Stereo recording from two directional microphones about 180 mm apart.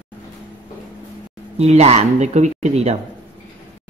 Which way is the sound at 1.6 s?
35° right (ahead or behind).